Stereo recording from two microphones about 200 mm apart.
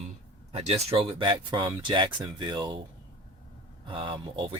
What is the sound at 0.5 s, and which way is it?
Speech, 30° right (ahead or behind).